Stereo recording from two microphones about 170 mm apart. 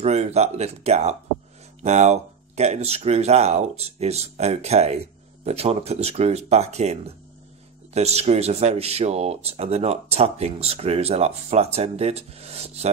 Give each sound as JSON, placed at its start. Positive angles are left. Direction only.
{"t": 0.0, "sound": "speech", "side_deg": -40}